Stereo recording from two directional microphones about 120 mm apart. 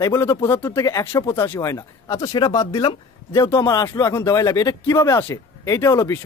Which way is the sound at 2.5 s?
45° left (ahead or behind).